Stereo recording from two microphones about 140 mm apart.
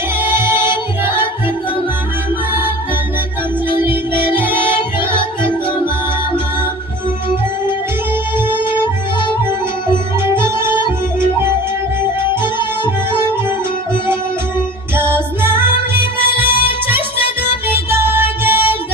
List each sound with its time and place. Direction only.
0.2 s music: 15° right (ahead or behind)
3.8 s music: 15° right (ahead or behind)
8.7 s music: 35° left (ahead or behind)
10.3 s music: 20° right (ahead or behind)
12.5 s music: 35° left (ahead or behind)
15.0 s music: 15° right (ahead or behind)
17.8 s music: 15° right (ahead or behind)